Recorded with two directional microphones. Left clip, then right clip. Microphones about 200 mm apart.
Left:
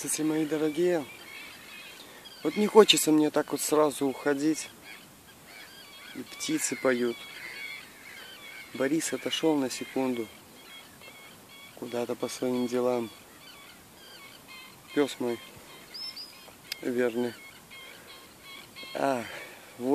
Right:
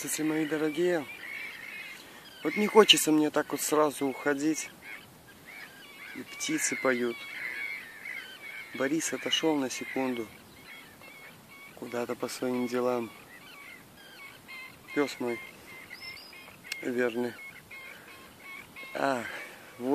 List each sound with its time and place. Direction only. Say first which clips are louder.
0.0 s speech: left 1 dB; centre (ahead or behind)
2.4 s speech: left 1 dB; centre (ahead or behind)
6.3 s speech: right 1 dB; 5° left (ahead or behind)
7.3 s owl: right 4 dB; 45° left (ahead or behind)
8.7 s speech: left 2 dB; 5° left (ahead or behind)
11.9 s speech: left 1 dB; centre (ahead or behind)
15.0 s speech: left 2 dB; 5° left (ahead or behind)
16.6 s speech: left 1 dB; centre (ahead or behind)
18.9 s a sound: left 1 dB; centre (ahead or behind)